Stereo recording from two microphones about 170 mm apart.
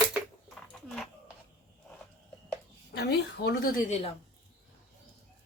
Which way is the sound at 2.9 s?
75° left (ahead or behind).